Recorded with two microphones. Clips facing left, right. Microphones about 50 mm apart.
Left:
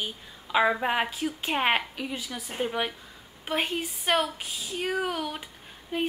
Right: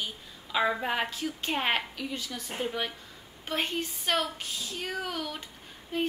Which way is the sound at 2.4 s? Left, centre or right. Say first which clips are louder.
Left 5 dB; centre.